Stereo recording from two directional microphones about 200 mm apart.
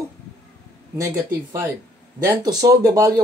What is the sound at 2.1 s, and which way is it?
Speech, 15° right (ahead or behind).